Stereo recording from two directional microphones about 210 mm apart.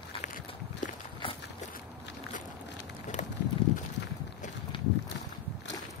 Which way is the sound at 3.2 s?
35° left (ahead or behind).